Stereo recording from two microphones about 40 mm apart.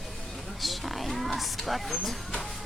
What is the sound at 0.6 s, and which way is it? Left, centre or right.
Speech, centre.